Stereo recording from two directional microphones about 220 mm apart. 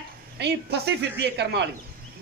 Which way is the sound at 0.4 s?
50° right (ahead or behind).